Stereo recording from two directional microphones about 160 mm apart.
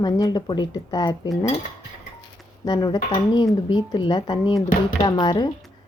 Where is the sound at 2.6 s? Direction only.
25° left (ahead or behind).